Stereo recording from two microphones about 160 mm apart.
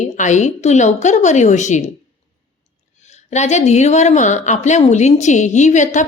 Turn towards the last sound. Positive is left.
turn(degrees=50)  # may be behind; listen again after turning